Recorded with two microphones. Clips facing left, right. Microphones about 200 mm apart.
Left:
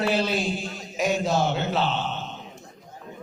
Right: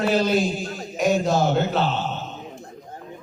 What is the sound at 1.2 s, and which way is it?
Speech, centre (ahead or behind).